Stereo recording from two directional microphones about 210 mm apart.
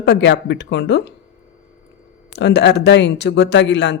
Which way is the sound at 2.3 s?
55° left (ahead or behind).